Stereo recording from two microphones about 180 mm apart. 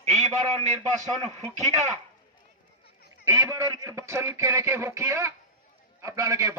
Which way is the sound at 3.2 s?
15° right (ahead or behind).